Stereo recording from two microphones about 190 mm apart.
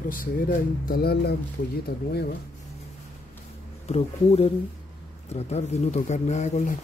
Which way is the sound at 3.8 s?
35° left (ahead or behind).